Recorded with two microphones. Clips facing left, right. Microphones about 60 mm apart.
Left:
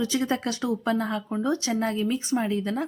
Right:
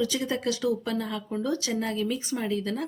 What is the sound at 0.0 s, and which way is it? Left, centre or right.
Speech, left.